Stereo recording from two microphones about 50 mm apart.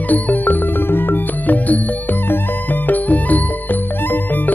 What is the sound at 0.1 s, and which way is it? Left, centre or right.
Music, left.